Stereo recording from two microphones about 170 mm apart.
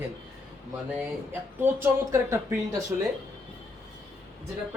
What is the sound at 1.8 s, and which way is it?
Speech, 15° right (ahead or behind).